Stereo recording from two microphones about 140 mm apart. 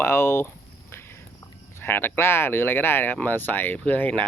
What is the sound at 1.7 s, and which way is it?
Speech, 15° left (ahead or behind).